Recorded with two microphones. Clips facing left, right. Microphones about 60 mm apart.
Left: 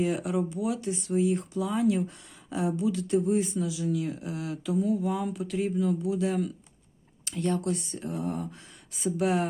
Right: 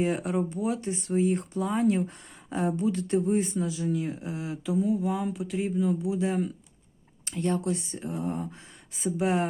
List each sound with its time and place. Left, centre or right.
0.0 s speech: right